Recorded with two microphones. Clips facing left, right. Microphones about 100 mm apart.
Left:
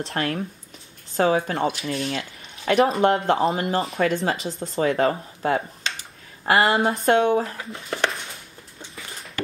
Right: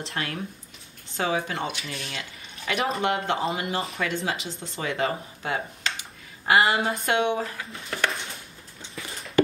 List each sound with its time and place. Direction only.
0.0 s speech: 40° left (ahead or behind)